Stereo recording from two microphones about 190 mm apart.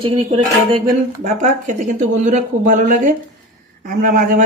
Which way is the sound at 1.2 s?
40° right (ahead or behind).